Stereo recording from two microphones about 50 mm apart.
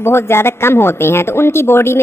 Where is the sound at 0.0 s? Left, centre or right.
Left.